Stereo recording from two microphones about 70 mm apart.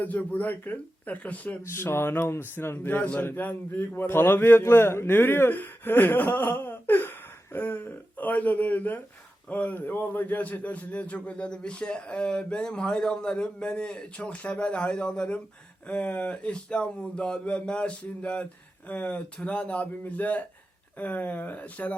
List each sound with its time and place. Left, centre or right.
0.0 s a man's voice: left
1.6 s a man's voice: left